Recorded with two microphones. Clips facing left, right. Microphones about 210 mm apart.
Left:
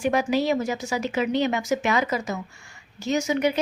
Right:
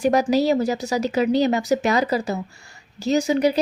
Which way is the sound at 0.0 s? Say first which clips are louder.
Right 4 dB; 40° right (ahead or behind).